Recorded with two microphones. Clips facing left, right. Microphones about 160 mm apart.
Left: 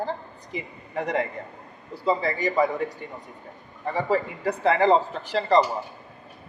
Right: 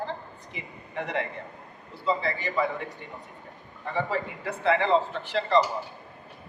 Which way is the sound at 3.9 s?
40° left (ahead or behind).